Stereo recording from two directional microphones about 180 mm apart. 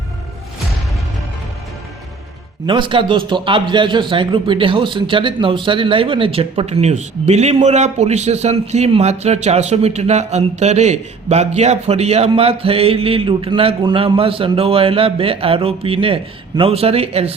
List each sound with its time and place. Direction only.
2.6 s a man's voice: 25° right (ahead or behind)